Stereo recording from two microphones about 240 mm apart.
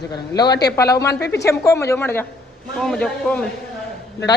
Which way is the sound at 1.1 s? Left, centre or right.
Left.